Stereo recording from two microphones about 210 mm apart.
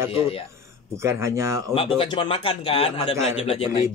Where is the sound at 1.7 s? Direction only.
25° left (ahead or behind).